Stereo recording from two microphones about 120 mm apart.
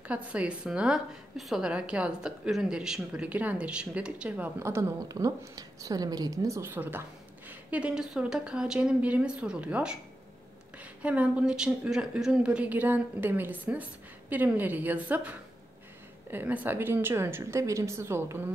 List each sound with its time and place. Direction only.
0.1 s speech: 10° right (ahead or behind)
4.6 s a woman's voice: 20° right (ahead or behind)